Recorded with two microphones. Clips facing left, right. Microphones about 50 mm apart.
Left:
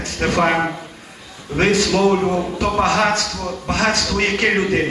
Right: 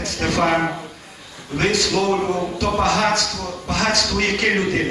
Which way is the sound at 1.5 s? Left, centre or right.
Left.